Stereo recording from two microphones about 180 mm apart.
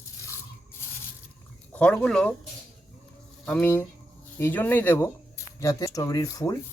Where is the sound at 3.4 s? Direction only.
10° left (ahead or behind).